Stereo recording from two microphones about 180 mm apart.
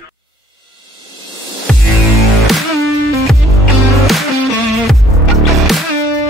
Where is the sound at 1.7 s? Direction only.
5° left (ahead or behind).